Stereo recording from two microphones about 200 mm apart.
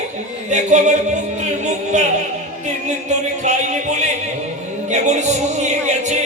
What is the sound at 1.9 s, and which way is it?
Music, 35° right (ahead or behind).